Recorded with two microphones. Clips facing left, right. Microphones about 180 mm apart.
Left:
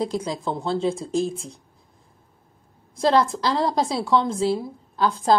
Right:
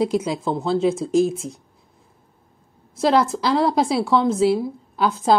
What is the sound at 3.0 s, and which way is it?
Speech, 5° right (ahead or behind).